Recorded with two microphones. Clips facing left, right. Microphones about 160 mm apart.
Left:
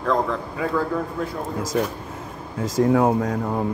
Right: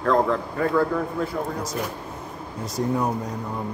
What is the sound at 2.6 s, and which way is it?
Speech, 90° left.